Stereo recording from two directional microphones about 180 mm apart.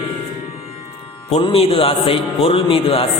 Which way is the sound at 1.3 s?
30° left (ahead or behind).